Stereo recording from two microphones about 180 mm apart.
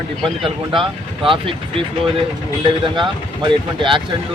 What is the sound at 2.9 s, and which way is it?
Speech, 25° right (ahead or behind).